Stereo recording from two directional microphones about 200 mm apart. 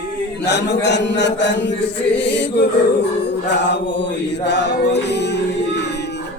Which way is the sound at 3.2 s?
60° left (ahead or behind).